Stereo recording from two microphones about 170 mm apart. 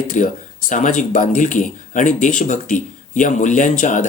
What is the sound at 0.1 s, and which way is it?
Speech, 50° left (ahead or behind).